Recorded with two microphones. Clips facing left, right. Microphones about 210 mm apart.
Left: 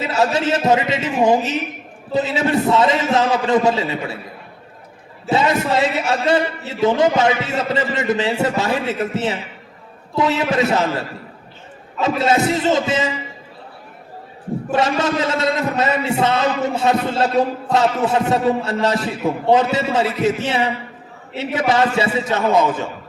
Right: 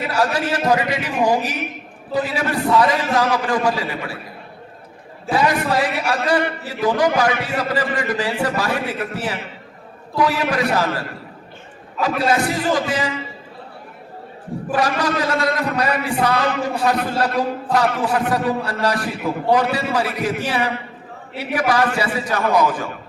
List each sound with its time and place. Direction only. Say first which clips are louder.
0.1 s a man's voice: left 3 dB; 25° left (ahead or behind)
5.3 s a man's voice: left 1 dB; 25° left (ahead or behind)
14.7 s a man's voice: left 2 dB; 25° left (ahead or behind)